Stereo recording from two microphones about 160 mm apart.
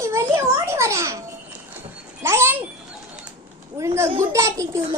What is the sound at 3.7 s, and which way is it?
A child's voice, 15° right (ahead or behind).